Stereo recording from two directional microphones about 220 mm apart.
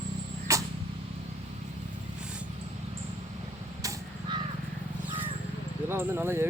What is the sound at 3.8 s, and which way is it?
Vehicle, 20° right (ahead or behind).